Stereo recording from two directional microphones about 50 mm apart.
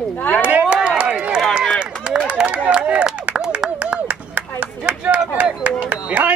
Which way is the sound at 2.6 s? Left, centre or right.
Right.